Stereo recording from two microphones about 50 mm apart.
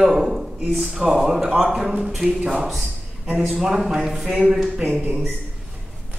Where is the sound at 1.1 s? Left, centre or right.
Centre.